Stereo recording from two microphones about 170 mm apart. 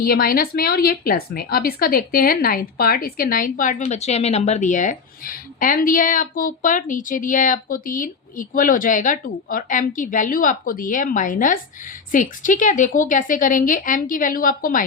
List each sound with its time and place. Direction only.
0.0 s a woman's voice: 60° left (ahead or behind)